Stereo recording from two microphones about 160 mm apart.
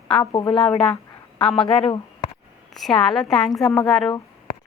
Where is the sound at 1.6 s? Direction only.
35° left (ahead or behind).